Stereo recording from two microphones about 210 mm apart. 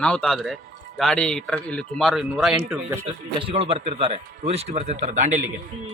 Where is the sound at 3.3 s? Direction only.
25° right (ahead or behind).